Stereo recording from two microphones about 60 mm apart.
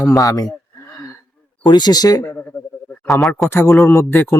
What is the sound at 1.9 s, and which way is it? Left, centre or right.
Speech, left.